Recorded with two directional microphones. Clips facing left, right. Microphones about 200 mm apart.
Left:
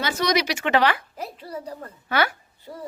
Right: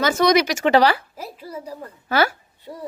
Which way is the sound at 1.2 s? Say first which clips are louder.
Even; 10° right (ahead or behind).